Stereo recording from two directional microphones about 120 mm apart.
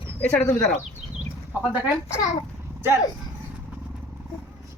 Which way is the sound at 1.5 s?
15° right (ahead or behind).